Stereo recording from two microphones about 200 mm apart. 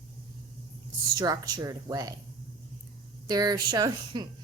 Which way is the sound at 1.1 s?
20° right (ahead or behind).